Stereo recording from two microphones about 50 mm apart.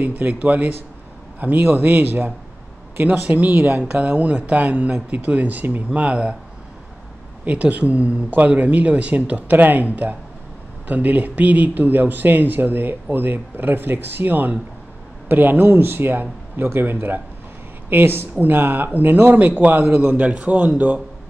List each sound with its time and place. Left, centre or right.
0.0 s speech: right
3.8 s speech: right
5.9 s speech: right
7.4 s a woman's voice: right